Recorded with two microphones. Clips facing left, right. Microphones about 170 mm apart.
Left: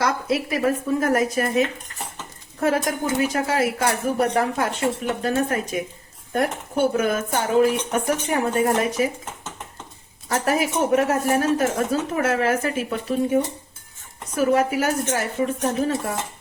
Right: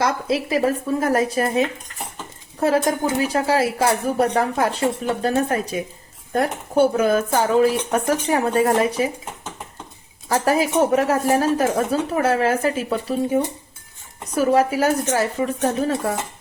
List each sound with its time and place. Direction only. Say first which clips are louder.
0.0 s speech: right 1 dB; 25° right (ahead or behind)
10.2 s speech: right 3 dB; 30° right (ahead or behind)